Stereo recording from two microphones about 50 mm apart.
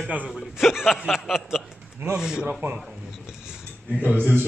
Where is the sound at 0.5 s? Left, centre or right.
Centre.